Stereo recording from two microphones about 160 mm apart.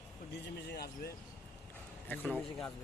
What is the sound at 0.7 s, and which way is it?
Speech, 75° left (ahead or behind).